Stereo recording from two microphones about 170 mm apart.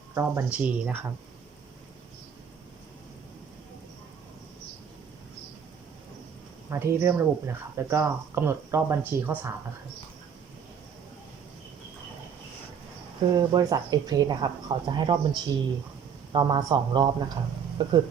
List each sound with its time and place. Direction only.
0.1 s speech: 15° right (ahead or behind)
6.7 s speech: 15° right (ahead or behind)
13.3 s speech: 20° right (ahead or behind)